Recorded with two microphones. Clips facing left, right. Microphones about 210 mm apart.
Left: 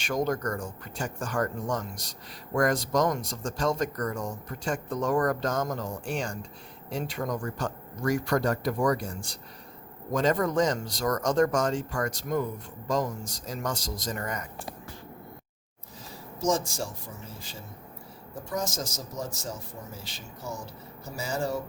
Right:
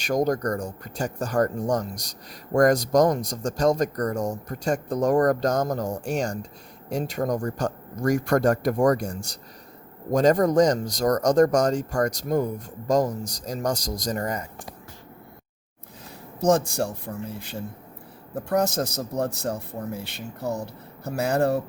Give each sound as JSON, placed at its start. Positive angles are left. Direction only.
{"t": 0.0, "sound": "speech", "side_deg": -40}
{"t": 16.4, "sound": "a man's voice", "side_deg": -60}